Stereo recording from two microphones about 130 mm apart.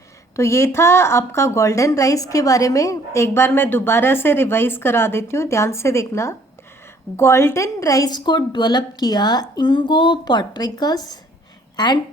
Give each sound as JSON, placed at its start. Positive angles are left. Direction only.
{"t": 0.3, "sound": "a woman's voice", "side_deg": 20}